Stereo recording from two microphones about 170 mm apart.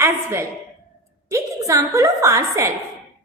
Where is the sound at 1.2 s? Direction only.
20° right (ahead or behind).